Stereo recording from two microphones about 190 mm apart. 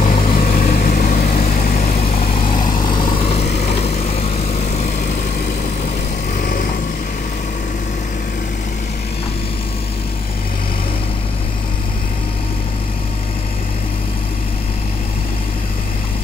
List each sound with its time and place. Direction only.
0.0 s vehicle: 40° left (ahead or behind)
6.3 s vehicle: 50° left (ahead or behind)